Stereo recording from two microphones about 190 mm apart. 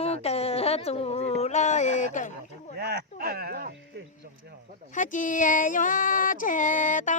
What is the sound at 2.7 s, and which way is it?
Speech, 60° right (ahead or behind).